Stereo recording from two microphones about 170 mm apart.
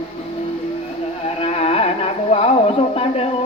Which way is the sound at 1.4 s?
35° left (ahead or behind).